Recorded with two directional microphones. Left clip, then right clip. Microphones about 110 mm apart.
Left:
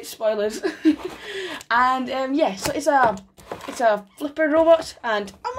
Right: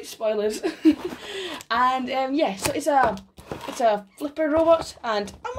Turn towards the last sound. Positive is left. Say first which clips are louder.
# left 2 dB
turn(degrees=10)  # may be behind; listen again after turning